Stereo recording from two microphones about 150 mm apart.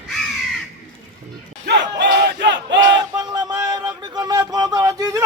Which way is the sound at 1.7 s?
90° right.